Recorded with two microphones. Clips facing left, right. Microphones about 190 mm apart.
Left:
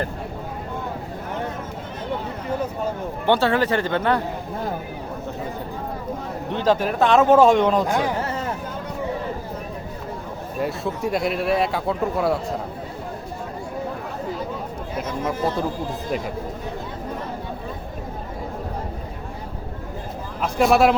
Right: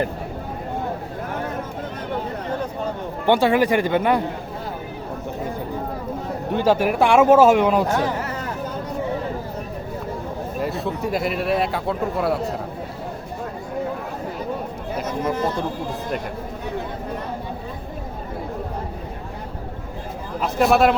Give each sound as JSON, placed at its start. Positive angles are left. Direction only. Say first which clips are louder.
{"t": 3.2, "sound": "speech", "louder": "right 2 dB", "side_deg": -15}
{"t": 6.5, "sound": "speech", "louder": "right 2 dB", "side_deg": -10}
{"t": 7.9, "sound": "speech", "louder": "right 1 dB", "side_deg": 10}
{"t": 8.2, "sound": "a sound", "louder": "left 2 dB", "side_deg": 25}
{"t": 10.6, "sound": "speech", "louder": "left 1 dB", "side_deg": 0}
{"t": 20.4, "sound": "speech", "louder": "even", "side_deg": 0}